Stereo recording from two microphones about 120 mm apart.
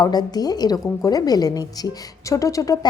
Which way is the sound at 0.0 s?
35° left (ahead or behind).